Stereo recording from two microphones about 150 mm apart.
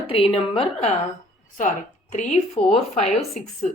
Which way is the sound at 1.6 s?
55° left (ahead or behind).